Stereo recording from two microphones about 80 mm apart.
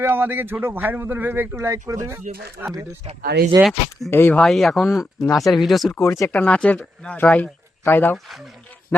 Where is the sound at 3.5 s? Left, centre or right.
Right.